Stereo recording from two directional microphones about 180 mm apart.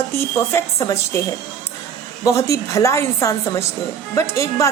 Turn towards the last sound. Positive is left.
turn(degrees=15)  # may be behind; listen again after turning